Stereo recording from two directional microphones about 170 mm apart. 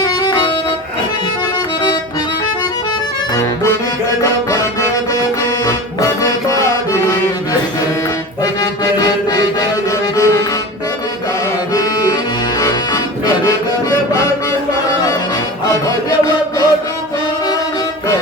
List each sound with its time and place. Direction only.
0.0 s music: 25° left (ahead or behind)
4.2 s music: 20° left (ahead or behind)
8.6 s music: 25° left (ahead or behind)
11.7 s accordion: 25° left (ahead or behind)
12.5 s music: 20° left (ahead or behind)
16.0 s chant: 20° left (ahead or behind)